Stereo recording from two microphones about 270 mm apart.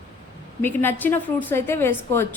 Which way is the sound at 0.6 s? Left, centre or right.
Centre.